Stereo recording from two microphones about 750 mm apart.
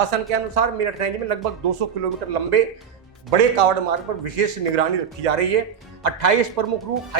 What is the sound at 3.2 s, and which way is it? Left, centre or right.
Speech, right.